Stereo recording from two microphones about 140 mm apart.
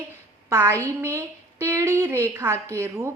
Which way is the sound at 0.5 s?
20° right (ahead or behind).